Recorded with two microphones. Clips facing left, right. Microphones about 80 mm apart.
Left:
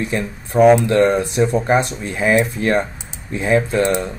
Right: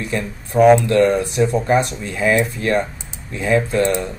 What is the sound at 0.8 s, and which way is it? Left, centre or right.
Speech, left.